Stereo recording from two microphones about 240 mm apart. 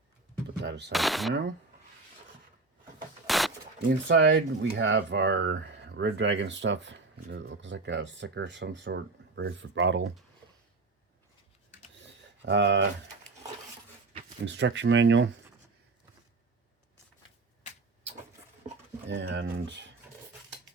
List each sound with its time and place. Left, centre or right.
0.6 s speech: right
0.9 s speech: centre
3.2 s a sound: centre
3.8 s speech: right
12.4 s speech: right
14.4 s speech: right
19.0 s speech: right